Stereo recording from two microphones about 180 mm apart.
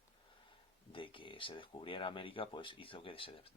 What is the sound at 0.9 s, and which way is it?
Speech, 30° left (ahead or behind).